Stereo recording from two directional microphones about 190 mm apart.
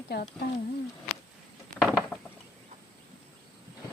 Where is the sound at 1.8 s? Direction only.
5° right (ahead or behind).